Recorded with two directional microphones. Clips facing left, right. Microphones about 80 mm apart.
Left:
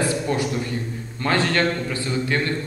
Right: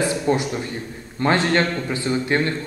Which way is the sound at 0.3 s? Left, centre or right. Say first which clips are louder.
Right 2 dB; right.